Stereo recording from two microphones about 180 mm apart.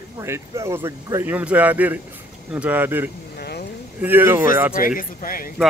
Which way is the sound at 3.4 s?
60° left (ahead or behind).